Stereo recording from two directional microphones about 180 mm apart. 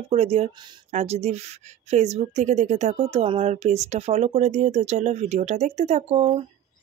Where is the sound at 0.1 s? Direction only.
35° right (ahead or behind).